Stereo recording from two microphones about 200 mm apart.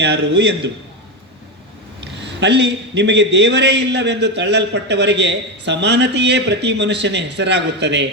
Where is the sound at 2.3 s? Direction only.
60° right (ahead or behind).